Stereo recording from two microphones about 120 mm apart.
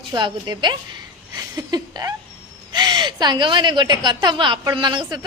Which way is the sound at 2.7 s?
35° right (ahead or behind).